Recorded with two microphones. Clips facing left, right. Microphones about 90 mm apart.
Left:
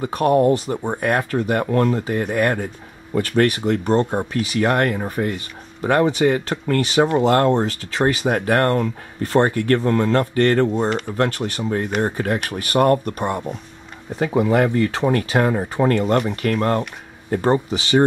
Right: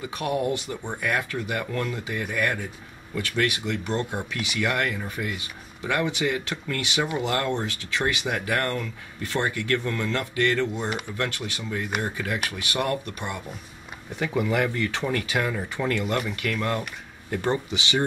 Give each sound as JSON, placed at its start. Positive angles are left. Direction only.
{"t": 0.0, "sound": "speech", "side_deg": 45}